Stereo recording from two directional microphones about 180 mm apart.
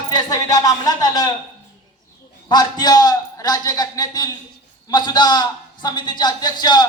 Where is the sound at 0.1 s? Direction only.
20° left (ahead or behind).